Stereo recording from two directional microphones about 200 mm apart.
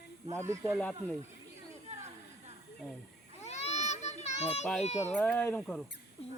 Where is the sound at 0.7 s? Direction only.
5° left (ahead or behind).